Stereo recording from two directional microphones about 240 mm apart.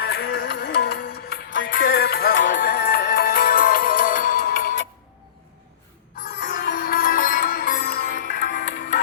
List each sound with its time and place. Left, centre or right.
0.0 s music: left
6.4 s music: left